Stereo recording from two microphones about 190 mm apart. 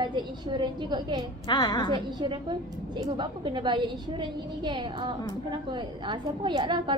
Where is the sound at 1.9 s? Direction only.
25° right (ahead or behind).